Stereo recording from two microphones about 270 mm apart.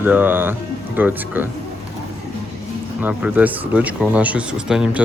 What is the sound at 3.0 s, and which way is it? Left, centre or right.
Speech, centre.